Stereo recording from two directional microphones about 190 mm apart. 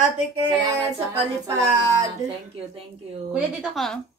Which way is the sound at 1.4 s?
20° right (ahead or behind).